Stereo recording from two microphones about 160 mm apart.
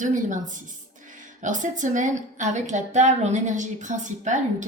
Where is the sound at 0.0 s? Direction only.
50° right (ahead or behind).